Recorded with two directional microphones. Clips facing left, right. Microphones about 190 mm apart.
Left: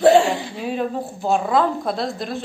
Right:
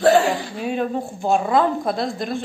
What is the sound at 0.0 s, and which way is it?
Hiccup, 25° left (ahead or behind).